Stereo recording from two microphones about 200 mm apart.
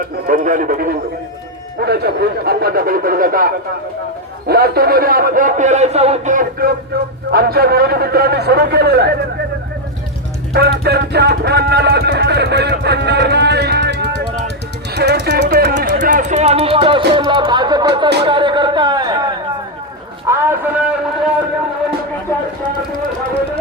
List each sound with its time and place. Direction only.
0.3 s a man's voice: 45° right (ahead or behind)
10.5 s a man's voice: 55° right (ahead or behind); by 20.9 s 10° right (ahead or behind)